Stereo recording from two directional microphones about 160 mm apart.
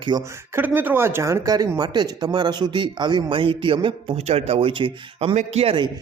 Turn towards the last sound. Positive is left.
turn(degrees=-35)  # may be behind; listen again after turning